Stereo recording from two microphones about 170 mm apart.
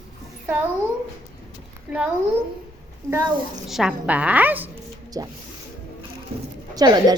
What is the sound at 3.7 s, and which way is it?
A woman's voice, centre (ahead or behind).